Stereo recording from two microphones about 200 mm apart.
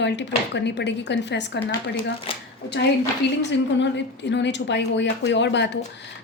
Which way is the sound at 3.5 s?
60° left (ahead or behind).